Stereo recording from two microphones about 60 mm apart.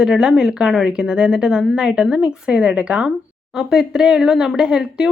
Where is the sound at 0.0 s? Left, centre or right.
Centre.